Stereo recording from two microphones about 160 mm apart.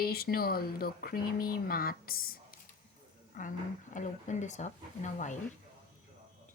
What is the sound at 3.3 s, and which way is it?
Speech, 55° left (ahead or behind).